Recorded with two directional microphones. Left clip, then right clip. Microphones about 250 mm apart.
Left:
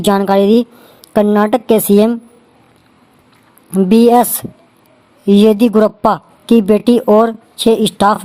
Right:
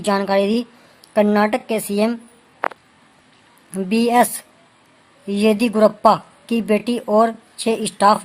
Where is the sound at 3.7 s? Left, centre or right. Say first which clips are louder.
Left 7 dB; centre.